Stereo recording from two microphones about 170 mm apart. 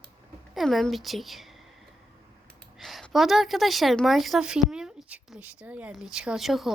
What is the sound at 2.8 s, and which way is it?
A woman's voice, centre (ahead or behind).